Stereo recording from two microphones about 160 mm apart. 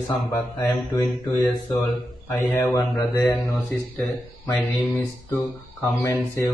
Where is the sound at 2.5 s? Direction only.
20° left (ahead or behind).